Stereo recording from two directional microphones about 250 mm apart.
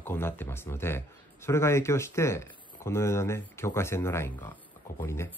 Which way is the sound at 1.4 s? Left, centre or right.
Centre.